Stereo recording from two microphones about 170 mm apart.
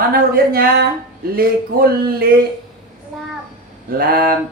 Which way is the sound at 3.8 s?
60° right (ahead or behind).